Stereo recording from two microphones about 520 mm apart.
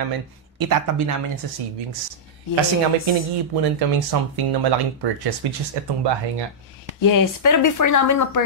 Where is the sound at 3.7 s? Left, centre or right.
Right.